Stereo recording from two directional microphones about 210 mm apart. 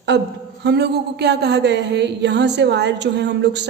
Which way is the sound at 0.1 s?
55° right (ahead or behind).